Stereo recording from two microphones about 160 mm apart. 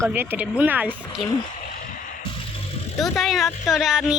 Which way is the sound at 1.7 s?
60° left (ahead or behind).